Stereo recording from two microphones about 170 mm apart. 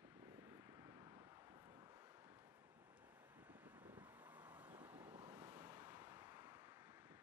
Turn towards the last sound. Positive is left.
turn(degrees=-15)  # may be behind; listen again after turning